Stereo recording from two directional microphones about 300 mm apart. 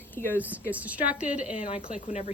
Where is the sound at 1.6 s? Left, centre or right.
Centre.